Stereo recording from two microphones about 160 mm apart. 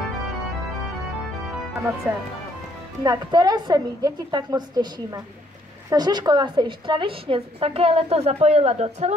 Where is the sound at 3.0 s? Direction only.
25° right (ahead or behind).